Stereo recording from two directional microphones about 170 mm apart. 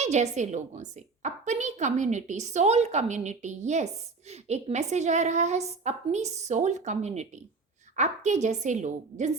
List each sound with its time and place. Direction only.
0.0 s a woman's voice: 40° right (ahead or behind)